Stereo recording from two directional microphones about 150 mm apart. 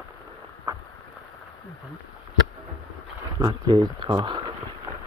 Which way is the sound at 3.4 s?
25° right (ahead or behind).